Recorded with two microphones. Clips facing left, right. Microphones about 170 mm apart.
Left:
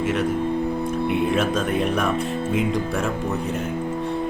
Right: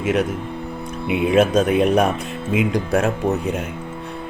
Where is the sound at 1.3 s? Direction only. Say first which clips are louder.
Right 6 dB; 85° right.